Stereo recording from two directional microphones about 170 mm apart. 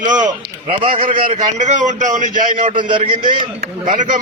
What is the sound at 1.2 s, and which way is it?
A man's voice, 45° right (ahead or behind).